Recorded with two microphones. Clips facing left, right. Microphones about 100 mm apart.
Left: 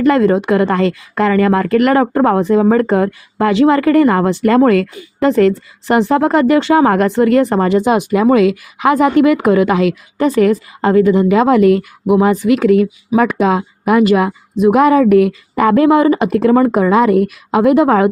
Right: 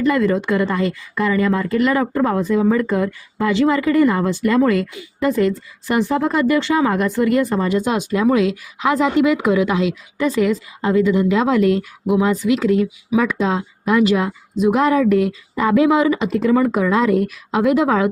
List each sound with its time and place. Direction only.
0.0 s speech: 60° left (ahead or behind)